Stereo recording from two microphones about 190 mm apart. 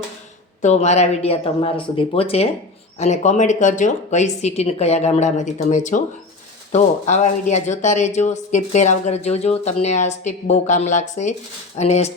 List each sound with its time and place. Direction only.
0.6 s speech: 35° left (ahead or behind)